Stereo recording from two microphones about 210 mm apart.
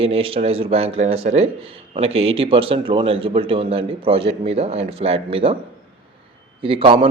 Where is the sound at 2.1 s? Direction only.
75° right (ahead or behind).